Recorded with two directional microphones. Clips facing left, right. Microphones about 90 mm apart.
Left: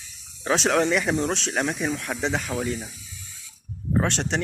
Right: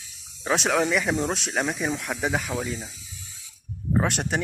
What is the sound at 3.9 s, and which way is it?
Speech, 10° right (ahead or behind).